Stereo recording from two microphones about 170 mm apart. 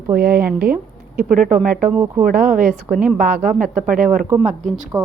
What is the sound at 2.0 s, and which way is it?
Speech, 15° right (ahead or behind).